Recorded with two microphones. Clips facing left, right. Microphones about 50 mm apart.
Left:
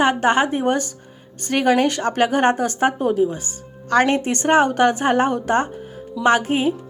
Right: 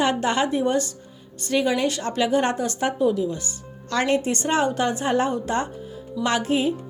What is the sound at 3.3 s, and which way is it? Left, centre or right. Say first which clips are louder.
Speech: left 1 dB; left.